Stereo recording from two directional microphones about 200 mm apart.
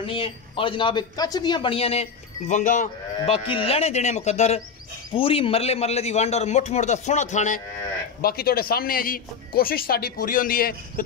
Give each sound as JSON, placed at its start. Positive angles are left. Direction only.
{"t": 0.0, "sound": "a man's voice", "side_deg": 25}
{"t": 3.3, "sound": "a man's voice", "side_deg": 30}
{"t": 8.2, "sound": "speech", "side_deg": 50}